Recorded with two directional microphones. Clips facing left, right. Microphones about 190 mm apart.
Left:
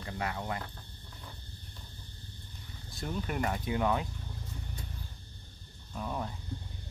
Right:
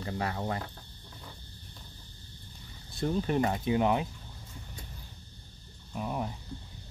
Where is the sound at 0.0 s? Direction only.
35° right (ahead or behind).